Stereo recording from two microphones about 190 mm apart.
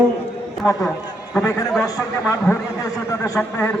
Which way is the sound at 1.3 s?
15° left (ahead or behind).